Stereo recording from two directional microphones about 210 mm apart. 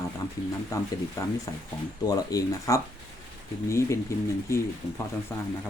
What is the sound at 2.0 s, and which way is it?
Speech, 15° left (ahead or behind).